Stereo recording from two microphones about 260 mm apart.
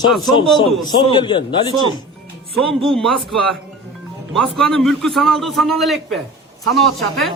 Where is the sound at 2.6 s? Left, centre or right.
Centre.